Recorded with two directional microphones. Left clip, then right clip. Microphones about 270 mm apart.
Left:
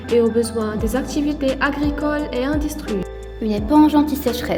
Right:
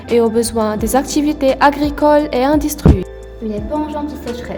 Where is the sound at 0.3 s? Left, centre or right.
Right.